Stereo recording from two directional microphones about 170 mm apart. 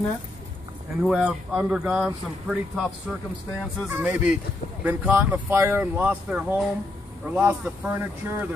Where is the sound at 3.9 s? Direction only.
10° right (ahead or behind).